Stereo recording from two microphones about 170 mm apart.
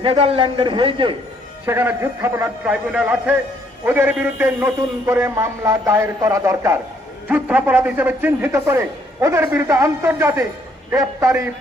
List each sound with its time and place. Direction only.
0.0 s a man's voice: 35° right (ahead or behind)
1.6 s a man's voice: 10° right (ahead or behind)